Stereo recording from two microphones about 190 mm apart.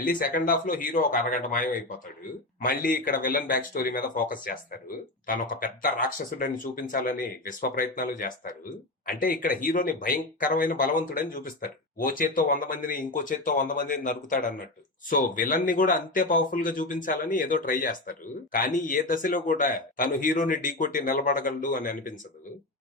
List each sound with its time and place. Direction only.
0.0 s speech: 45° left (ahead or behind)